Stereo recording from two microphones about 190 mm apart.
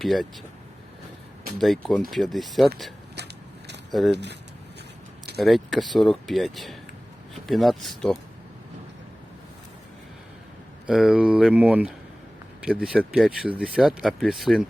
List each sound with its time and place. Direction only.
0.0 s speech: centre (ahead or behind)
1.5 s speech: centre (ahead or behind)
4.1 s speech: 65° right (ahead or behind)
5.4 s speech: centre (ahead or behind)
10.8 s speech: 5° right (ahead or behind)